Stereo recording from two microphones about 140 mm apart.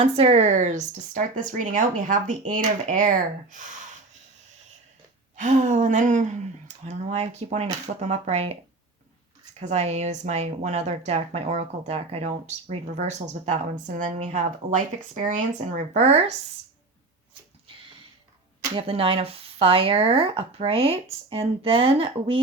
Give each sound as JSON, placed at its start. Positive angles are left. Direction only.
{"t": 0.0, "sound": "speech", "side_deg": -45}
{"t": 5.4, "sound": "speech", "side_deg": -60}
{"t": 9.6, "sound": "speech", "side_deg": -50}
{"t": 16.0, "sound": "speech", "side_deg": -50}
{"t": 18.7, "sound": "speech", "side_deg": -40}